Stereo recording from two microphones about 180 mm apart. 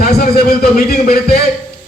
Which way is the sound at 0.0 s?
55° left (ahead or behind).